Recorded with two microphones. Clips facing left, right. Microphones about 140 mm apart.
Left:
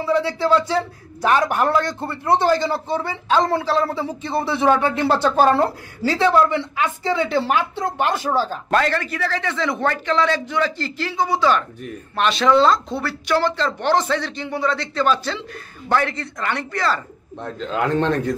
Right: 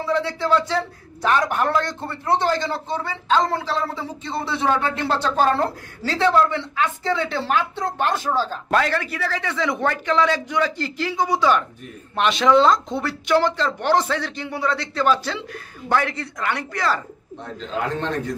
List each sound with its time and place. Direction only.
0.0 s a man's voice: 10° left (ahead or behind)
8.6 s speech: 5° right (ahead or behind)